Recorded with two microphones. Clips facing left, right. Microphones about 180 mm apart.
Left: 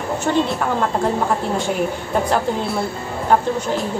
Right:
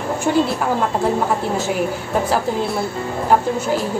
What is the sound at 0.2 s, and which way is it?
Speech, 5° right (ahead or behind).